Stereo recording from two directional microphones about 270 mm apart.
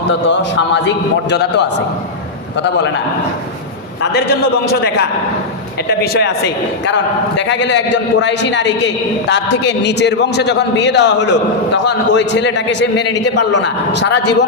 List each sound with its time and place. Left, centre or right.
0.1 s a man's voice: left
4.0 s a man's voice: left